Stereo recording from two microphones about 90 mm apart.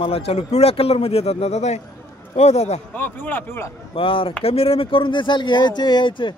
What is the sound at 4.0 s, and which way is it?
Speech, 80° left.